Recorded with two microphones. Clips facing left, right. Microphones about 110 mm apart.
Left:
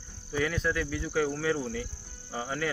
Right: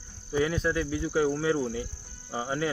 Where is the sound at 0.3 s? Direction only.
20° right (ahead or behind).